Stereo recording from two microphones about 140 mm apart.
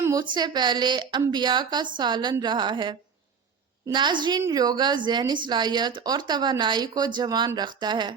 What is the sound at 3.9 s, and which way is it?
Speech, 30° right (ahead or behind).